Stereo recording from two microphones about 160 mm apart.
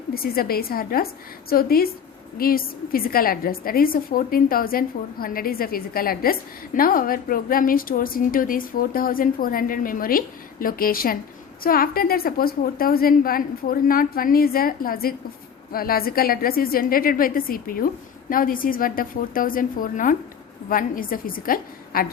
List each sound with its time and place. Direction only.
0.1 s a woman's voice: 70° left (ahead or behind)